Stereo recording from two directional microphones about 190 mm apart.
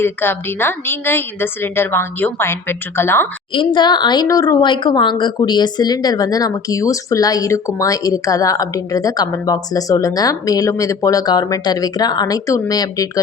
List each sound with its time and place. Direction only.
0.0 s a woman's voice: 10° left (ahead or behind)
3.5 s speech: 25° left (ahead or behind)